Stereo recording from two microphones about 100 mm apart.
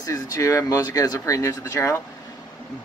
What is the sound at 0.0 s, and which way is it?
Speech, 35° left (ahead or behind).